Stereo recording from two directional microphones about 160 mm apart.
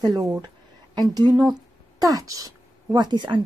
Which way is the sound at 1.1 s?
25° right (ahead or behind).